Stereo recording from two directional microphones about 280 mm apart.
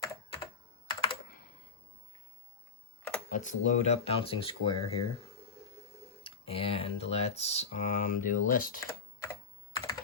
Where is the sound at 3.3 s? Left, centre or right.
Left.